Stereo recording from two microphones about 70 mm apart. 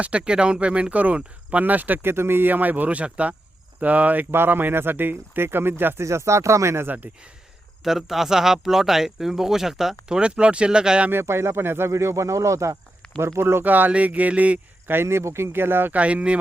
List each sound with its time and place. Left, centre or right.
0.0 s speech: centre; by 6.1 s right
6.1 s speech: right
6.8 s speech: right
7.9 s speech: centre
11.1 s speech: right
14.9 s speech: right; by 16.4 s centre